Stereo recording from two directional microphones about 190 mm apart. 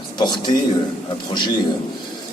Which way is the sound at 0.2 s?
20° left (ahead or behind).